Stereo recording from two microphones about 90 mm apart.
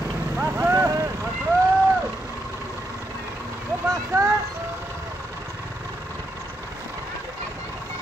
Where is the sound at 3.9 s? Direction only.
35° right (ahead or behind).